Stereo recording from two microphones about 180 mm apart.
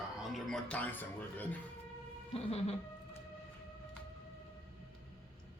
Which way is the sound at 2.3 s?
35° left (ahead or behind).